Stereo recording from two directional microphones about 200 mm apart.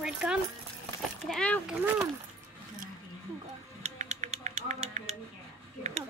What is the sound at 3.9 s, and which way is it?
Music, 35° right (ahead or behind).